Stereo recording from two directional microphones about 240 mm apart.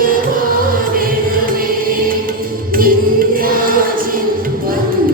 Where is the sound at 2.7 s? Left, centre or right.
Right.